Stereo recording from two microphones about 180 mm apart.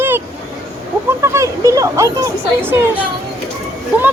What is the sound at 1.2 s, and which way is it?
A woman's voice, 15° right (ahead or behind).